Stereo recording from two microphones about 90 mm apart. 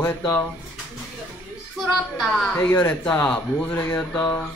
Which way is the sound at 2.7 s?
15° left (ahead or behind).